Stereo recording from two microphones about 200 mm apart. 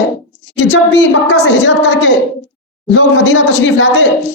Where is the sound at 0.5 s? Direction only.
65° left (ahead or behind).